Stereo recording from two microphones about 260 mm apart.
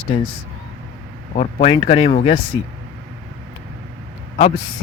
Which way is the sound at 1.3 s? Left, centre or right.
Left.